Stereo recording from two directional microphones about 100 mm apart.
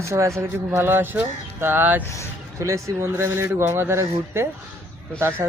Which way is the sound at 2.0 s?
30° left (ahead or behind).